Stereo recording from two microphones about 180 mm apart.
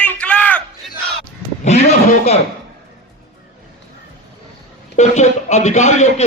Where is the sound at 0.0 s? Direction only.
5° left (ahead or behind).